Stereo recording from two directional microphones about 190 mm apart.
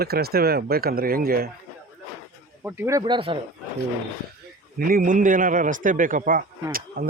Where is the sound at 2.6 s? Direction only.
10° right (ahead or behind).